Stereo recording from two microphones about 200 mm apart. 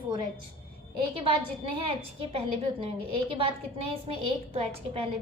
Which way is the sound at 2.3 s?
30° right (ahead or behind).